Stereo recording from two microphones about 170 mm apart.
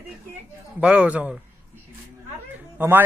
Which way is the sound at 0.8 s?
5° right (ahead or behind).